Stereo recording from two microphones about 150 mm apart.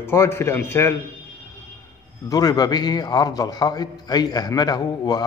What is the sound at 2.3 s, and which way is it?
A man's voice, 25° left (ahead or behind).